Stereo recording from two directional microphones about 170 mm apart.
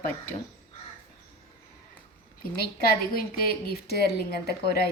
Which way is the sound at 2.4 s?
60° left (ahead or behind).